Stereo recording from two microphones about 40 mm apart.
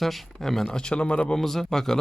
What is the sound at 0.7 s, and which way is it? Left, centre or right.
Speech, left.